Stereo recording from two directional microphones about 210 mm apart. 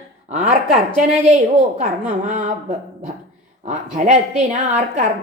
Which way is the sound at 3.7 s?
35° right (ahead or behind).